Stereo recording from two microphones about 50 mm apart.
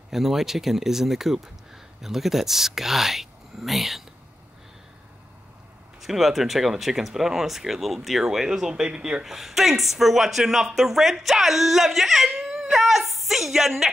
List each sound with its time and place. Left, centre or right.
0.1 s speech: centre
5.9 s speech: centre
9.2 s speech: centre
12.4 s a sound: centre